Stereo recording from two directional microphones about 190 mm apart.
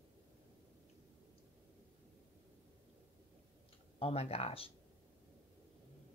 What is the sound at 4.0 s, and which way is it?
Speech, 30° left (ahead or behind).